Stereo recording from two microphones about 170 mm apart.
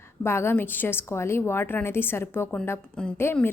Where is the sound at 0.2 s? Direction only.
15° left (ahead or behind).